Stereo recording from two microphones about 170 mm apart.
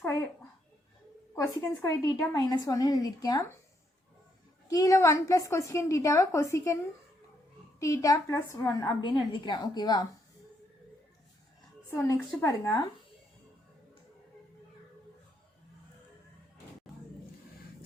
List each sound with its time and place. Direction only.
1.4 s a woman's voice: 20° left (ahead or behind)
4.7 s a woman's voice: 20° left (ahead or behind)
7.8 s a woman's voice: 20° left (ahead or behind)
11.9 s a woman's voice: 20° left (ahead or behind)